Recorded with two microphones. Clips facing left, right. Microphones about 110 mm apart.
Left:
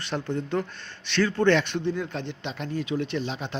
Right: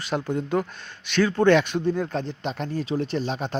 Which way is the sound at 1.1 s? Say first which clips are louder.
Right 3 dB; 45° right (ahead or behind).